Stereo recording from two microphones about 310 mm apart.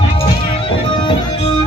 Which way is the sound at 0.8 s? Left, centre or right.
Centre.